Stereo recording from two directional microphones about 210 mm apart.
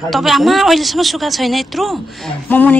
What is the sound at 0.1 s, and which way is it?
Speech, centre (ahead or behind).